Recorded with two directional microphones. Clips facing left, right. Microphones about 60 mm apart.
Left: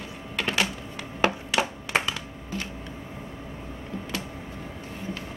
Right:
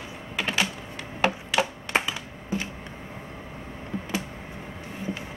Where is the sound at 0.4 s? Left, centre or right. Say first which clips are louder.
Even; centre.